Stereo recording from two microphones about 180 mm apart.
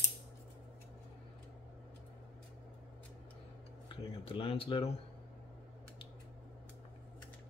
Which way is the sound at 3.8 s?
30° left (ahead or behind).